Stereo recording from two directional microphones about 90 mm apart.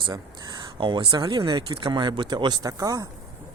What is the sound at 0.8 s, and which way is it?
Speech, 65° right (ahead or behind).